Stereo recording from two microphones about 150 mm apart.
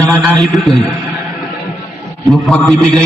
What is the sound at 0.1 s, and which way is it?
Speech, centre (ahead or behind).